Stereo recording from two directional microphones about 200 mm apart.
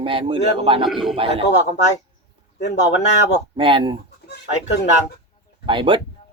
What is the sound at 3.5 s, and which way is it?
Speech, 25° right (ahead or behind).